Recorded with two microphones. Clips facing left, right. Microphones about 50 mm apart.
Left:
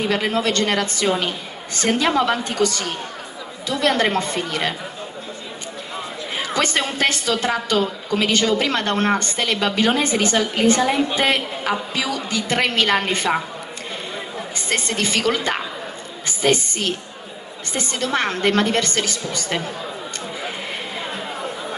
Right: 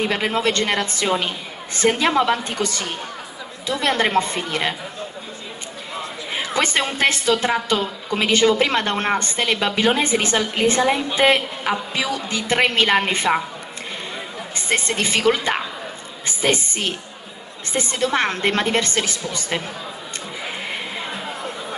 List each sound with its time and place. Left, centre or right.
0.1 s a woman's voice: centre
6.3 s a woman's voice: centre
14.7 s a woman's voice: centre
16.3 s a sound: centre
17.7 s a woman's voice: centre
21.1 s chatter: centre